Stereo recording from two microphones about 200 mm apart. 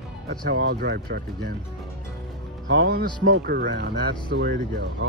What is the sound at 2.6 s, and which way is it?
Speech, 50° right (ahead or behind).